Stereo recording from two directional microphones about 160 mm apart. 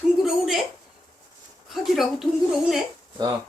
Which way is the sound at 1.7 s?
Centre (ahead or behind).